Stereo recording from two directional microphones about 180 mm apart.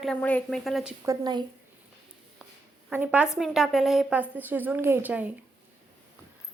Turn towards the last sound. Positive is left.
turn(degrees=-10)  # may be behind; listen again after turning